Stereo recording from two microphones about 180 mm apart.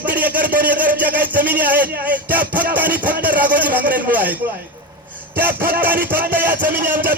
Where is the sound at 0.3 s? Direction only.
50° right (ahead or behind).